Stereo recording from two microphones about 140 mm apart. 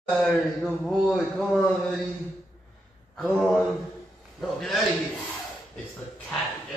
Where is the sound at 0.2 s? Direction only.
Centre (ahead or behind).